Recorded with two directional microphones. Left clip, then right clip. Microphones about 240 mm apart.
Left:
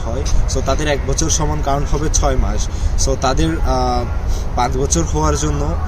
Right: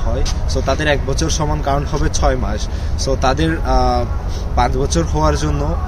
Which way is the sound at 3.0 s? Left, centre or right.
Centre.